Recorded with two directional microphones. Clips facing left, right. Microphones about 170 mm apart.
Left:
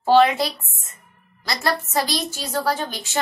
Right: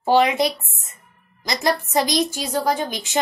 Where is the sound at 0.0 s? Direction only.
15° right (ahead or behind).